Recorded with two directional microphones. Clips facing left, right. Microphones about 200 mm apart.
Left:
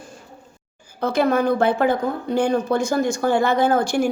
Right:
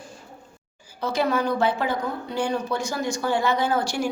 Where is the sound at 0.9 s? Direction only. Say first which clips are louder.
Left 5 dB; 55° left (ahead or behind).